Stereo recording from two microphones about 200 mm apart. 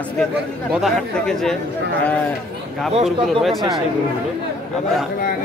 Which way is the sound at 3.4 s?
Centre (ahead or behind).